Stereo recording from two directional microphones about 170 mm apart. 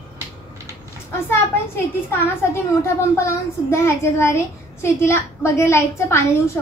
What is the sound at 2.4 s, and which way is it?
A child's voice, 15° left (ahead or behind).